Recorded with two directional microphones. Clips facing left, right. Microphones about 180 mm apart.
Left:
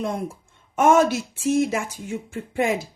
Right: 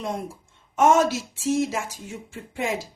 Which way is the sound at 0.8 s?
55° left (ahead or behind).